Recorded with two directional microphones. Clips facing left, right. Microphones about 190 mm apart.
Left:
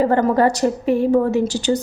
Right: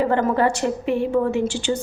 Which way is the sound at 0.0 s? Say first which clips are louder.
Left 3 dB; 40° left (ahead or behind).